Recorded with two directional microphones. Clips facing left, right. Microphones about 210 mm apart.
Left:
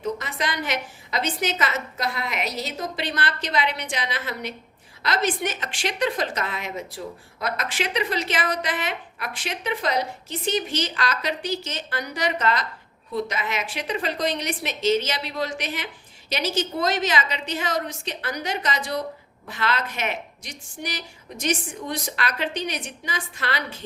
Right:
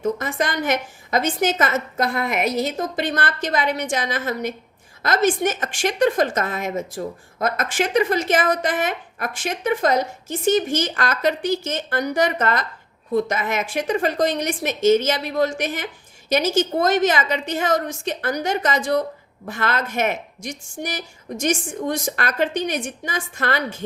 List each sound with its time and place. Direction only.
0.0 s a woman's voice: 50° right (ahead or behind)